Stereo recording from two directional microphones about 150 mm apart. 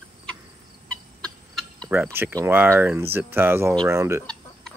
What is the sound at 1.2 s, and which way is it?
Fowl, 5° left (ahead or behind).